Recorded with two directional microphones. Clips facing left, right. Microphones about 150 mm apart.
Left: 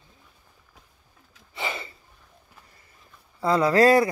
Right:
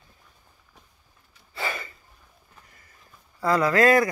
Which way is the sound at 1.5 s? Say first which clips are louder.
Even; 20° left (ahead or behind).